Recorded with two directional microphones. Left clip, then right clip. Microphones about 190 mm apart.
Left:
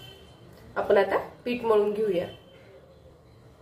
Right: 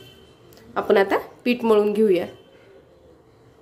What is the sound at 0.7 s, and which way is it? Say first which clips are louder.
A woman's voice: right 4 dB; 70° right (ahead or behind).